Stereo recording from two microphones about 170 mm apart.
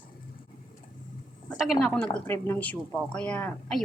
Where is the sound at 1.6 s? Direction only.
Centre (ahead or behind).